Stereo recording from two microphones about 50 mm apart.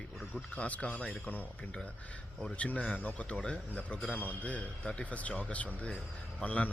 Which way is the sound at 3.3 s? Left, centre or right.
Centre.